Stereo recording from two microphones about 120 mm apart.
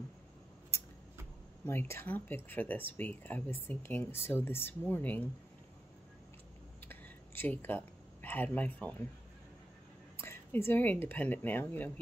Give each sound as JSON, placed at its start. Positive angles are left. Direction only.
{"t": 1.7, "sound": "speech", "side_deg": 20}
{"t": 6.9, "sound": "a sound", "side_deg": 15}
{"t": 10.1, "sound": "speech", "side_deg": 20}